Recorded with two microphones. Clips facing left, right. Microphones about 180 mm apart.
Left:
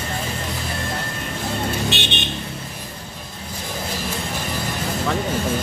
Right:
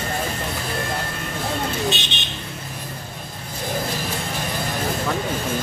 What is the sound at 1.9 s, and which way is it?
Vehicle, 65° left (ahead or behind).